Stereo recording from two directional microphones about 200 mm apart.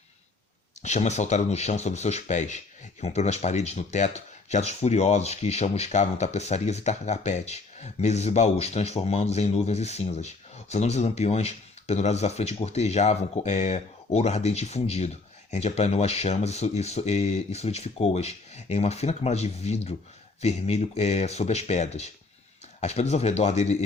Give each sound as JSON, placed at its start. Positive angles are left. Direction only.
{"t": 0.8, "sound": "speech", "side_deg": 35}